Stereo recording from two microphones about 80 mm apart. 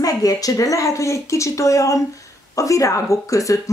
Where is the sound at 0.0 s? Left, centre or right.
Left.